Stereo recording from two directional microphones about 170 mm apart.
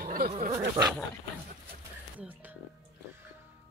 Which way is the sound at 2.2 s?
10° right (ahead or behind).